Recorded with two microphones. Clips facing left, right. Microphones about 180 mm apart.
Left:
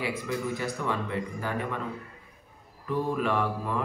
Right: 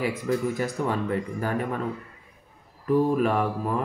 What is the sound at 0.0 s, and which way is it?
A man's voice, 45° right (ahead or behind).